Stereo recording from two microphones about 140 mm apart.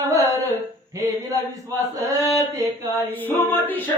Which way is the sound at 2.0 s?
25° right (ahead or behind).